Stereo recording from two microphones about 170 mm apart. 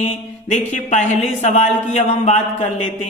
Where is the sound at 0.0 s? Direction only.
45° left (ahead or behind).